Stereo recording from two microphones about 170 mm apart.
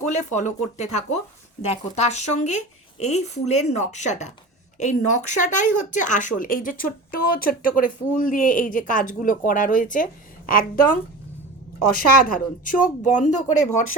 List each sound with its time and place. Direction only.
0.0 s speech: 45° left (ahead or behind)